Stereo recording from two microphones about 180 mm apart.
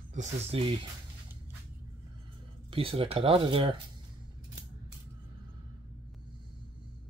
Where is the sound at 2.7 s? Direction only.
30° right (ahead or behind).